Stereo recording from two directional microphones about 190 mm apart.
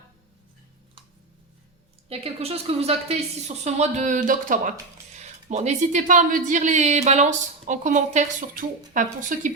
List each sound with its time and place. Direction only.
2.0 s speech: 30° right (ahead or behind)